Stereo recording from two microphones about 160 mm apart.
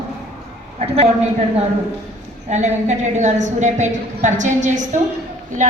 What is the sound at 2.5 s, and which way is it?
A woman's voice, 45° right (ahead or behind).